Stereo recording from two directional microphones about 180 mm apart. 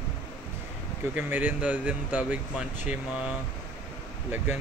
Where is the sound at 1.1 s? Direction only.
10° right (ahead or behind).